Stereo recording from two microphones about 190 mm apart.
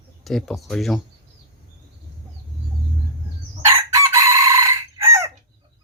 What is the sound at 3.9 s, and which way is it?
Chicken, 15° right (ahead or behind).